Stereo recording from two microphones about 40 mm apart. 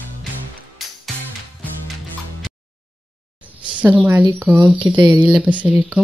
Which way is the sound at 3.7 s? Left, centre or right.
Right.